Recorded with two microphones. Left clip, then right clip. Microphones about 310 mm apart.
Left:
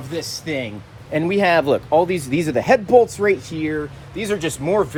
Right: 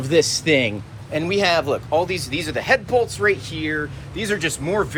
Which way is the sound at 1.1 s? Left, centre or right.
Left.